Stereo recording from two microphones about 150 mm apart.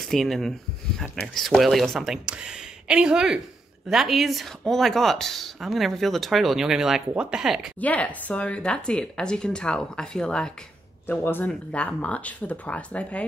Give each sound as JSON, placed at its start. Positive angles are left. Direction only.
{"t": 0.0, "sound": "speech", "side_deg": 0}
{"t": 7.8, "sound": "speech", "side_deg": 10}